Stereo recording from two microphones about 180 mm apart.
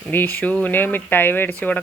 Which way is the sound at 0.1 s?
10° left (ahead or behind).